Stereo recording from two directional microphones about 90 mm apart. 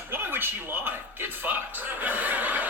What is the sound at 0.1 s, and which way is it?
A man's voice, 25° right (ahead or behind).